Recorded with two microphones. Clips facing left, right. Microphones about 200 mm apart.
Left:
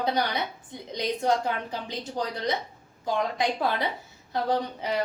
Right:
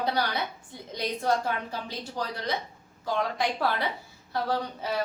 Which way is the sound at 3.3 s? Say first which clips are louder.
Left 1 dB; 20° left (ahead or behind).